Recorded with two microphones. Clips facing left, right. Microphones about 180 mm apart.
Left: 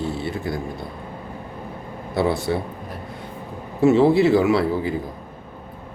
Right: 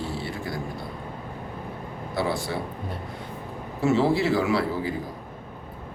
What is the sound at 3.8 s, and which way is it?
Speech, 20° left (ahead or behind).